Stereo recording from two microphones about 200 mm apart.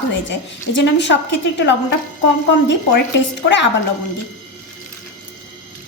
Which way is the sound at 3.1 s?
60° left (ahead or behind).